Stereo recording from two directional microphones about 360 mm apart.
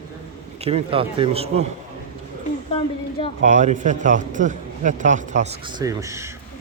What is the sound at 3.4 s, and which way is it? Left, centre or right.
A man's voice, centre.